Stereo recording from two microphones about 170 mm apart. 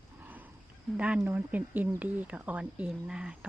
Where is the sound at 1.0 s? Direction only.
5° right (ahead or behind).